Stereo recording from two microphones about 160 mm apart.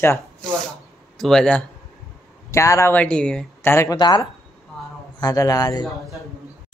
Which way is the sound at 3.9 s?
25° left (ahead or behind).